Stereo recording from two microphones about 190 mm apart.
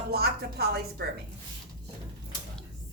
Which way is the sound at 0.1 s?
55° right (ahead or behind).